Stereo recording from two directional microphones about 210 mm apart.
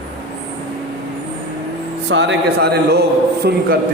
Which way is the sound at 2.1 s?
55° right (ahead or behind).